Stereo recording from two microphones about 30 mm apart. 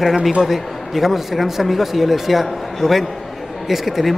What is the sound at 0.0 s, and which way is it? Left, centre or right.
A man's voice, centre.